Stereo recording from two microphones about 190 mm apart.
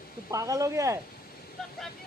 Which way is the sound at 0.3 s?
15° right (ahead or behind).